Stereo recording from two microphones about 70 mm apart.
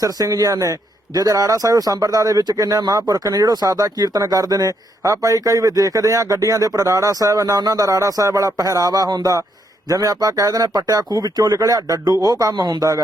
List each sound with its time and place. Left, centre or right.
0.0 s speech: right
5.1 s speech: right
9.9 s speech: right
11.2 s speech: right